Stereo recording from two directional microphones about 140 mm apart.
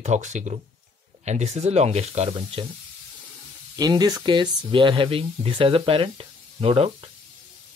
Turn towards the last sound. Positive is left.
turn(degrees=-40)  # may be behind; listen again after turning